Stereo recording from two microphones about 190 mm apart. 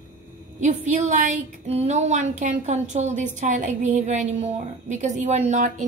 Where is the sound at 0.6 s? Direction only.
40° right (ahead or behind).